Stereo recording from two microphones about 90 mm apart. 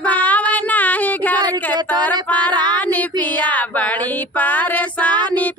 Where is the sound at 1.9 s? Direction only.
15° left (ahead or behind).